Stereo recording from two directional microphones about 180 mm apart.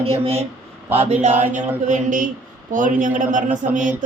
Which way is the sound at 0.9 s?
40° right (ahead or behind).